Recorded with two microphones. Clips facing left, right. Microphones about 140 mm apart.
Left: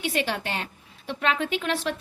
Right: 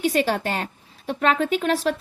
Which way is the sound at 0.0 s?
40° right (ahead or behind).